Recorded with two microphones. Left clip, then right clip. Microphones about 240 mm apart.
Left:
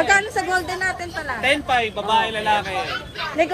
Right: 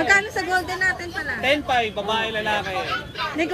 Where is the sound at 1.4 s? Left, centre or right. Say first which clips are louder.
Left 1 dB; left.